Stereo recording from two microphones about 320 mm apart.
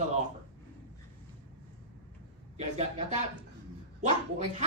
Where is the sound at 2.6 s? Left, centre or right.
Right.